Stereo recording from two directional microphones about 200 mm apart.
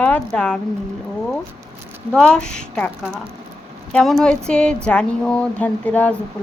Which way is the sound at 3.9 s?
Centre (ahead or behind).